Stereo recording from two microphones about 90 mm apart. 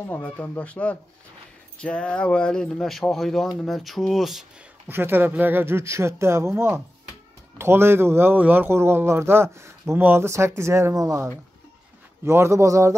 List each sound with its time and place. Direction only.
0.1 s speech: 15° left (ahead or behind); by 4.5 s 5° right (ahead or behind)
4.8 s a man's voice: 25° right (ahead or behind)